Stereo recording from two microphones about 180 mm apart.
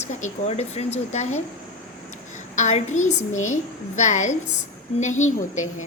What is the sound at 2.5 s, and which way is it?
A woman's voice, 40° left (ahead or behind).